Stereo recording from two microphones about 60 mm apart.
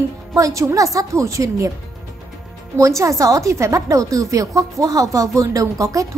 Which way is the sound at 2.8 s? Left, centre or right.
Right.